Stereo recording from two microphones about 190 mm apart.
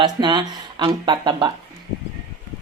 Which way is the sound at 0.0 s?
25° right (ahead or behind).